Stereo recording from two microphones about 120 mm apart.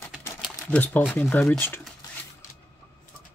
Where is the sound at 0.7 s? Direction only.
15° left (ahead or behind).